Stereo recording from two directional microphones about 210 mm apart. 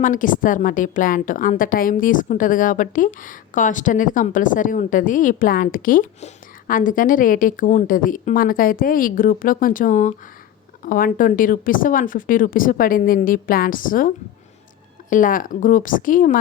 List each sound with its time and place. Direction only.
0.0 s a woman's voice: 40° left (ahead or behind)
15.1 s a woman's voice: 40° left (ahead or behind)